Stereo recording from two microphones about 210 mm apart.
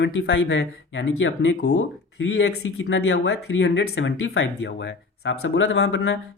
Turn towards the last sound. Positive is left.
turn(degrees=55)  # may be behind; listen again after turning